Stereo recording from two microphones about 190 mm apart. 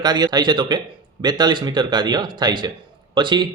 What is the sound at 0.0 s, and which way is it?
Speech, 20° right (ahead or behind).